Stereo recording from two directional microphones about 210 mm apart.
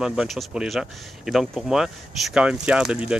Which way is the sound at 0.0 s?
5° right (ahead or behind).